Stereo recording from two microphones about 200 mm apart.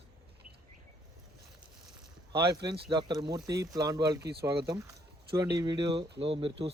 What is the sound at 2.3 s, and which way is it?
Speech, 20° right (ahead or behind).